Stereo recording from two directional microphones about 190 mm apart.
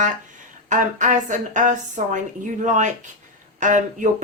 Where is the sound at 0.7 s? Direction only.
40° right (ahead or behind).